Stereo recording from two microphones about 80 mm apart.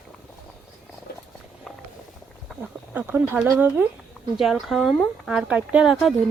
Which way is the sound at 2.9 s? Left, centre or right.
Right.